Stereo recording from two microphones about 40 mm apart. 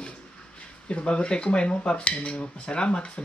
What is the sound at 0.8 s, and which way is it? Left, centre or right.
Speech, left.